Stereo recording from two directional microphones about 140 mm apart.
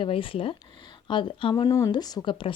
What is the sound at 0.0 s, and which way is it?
Speech, 40° left (ahead or behind).